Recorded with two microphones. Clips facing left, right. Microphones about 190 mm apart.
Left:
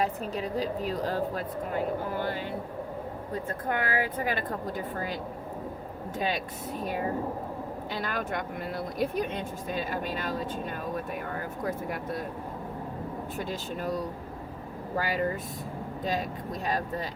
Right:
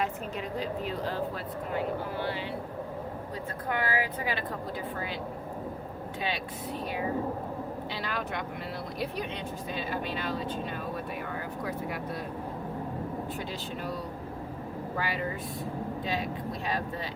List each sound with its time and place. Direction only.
0.0 s a woman's voice: 35° left (ahead or behind)
6.1 s speech: 45° left (ahead or behind)
13.5 s speech: 45° left (ahead or behind)